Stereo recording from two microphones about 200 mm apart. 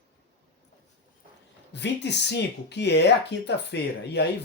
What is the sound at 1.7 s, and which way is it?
Speech, 60° left (ahead or behind).